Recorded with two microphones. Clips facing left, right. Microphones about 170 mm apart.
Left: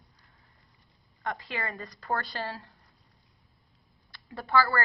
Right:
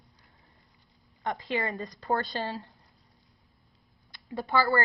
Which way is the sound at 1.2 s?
20° right (ahead or behind).